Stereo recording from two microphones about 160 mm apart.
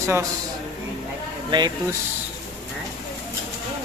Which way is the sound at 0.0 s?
15° right (ahead or behind).